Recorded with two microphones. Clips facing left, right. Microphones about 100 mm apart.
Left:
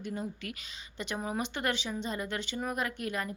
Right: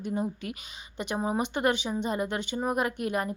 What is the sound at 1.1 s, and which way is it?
Speech, 25° right (ahead or behind).